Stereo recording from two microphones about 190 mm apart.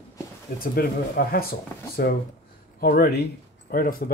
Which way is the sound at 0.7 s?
50° left (ahead or behind).